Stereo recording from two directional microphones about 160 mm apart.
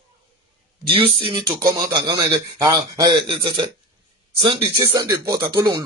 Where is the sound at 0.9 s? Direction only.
35° right (ahead or behind).